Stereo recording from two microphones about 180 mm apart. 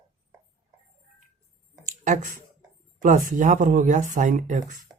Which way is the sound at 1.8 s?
45° right (ahead or behind).